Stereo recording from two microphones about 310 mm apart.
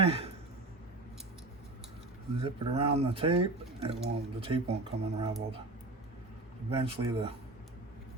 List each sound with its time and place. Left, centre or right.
0.0 s a sound: centre
2.4 s speech: centre
6.7 s speech: centre